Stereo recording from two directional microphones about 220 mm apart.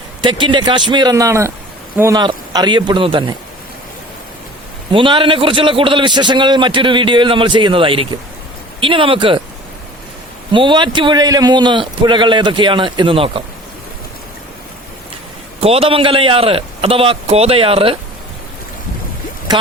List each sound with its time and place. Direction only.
0.2 s a man's voice: 20° right (ahead or behind)
4.9 s a man's voice: 20° right (ahead or behind)
10.5 s a man's voice: 20° right (ahead or behind)
15.6 s a man's voice: 25° right (ahead or behind)